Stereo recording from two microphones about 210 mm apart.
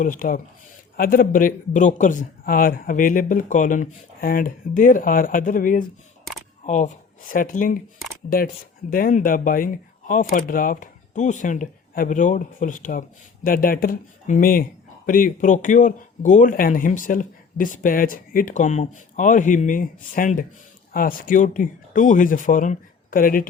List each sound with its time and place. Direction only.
0.0 s speech: 40° left (ahead or behind)
8.9 s speech: 40° left (ahead or behind)